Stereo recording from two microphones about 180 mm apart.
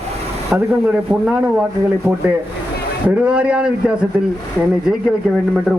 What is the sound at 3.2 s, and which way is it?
Speech, 5° right (ahead or behind).